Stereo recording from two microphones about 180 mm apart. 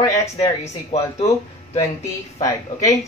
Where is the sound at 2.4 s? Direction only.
20° left (ahead or behind).